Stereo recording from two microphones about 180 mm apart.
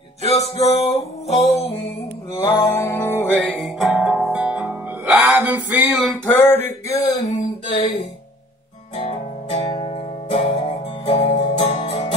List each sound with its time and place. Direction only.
0.3 s music: 35° left (ahead or behind)
2.3 s music: 25° left (ahead or behind)
2.6 s music: 15° left (ahead or behind); by 6.1 s 5° right (ahead or behind)
6.2 s a sound: 10° left (ahead or behind)
7.2 s a sound: 40° left (ahead or behind)
8.9 s music: 35° left (ahead or behind)